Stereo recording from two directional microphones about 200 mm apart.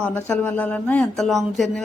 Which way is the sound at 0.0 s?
5° left (ahead or behind).